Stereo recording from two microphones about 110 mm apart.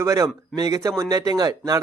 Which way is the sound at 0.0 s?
30° right (ahead or behind).